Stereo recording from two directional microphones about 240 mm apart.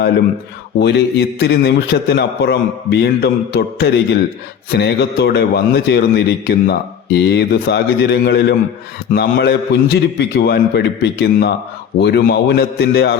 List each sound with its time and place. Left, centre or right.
0.8 s a man's voice: left